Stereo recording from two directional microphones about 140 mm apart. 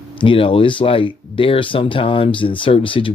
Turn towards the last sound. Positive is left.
turn(degrees=40)  # may be behind; listen again after turning